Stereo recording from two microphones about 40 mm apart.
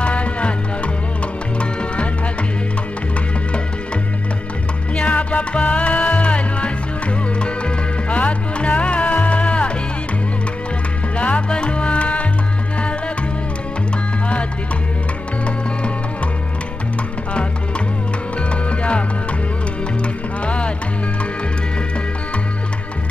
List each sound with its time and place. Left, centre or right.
0.0 s music: left
1.6 s music: left
4.9 s music: left
11.1 s salsa music: left
17.3 s music: left
20.4 s music: left